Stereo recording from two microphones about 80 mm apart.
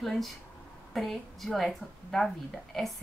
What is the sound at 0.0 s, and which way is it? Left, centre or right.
A woman's voice, centre.